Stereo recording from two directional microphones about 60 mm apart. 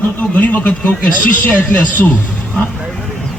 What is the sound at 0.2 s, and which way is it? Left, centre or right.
A man's voice, left.